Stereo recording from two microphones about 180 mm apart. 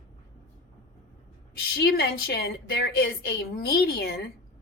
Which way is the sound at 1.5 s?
60° left (ahead or behind).